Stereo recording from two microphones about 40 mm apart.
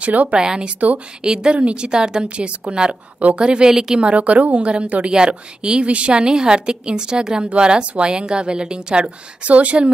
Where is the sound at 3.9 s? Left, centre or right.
Right.